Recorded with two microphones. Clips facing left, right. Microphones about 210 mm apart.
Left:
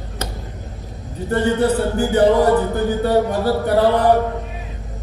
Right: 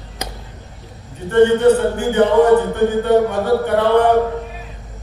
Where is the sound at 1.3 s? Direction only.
35° left (ahead or behind).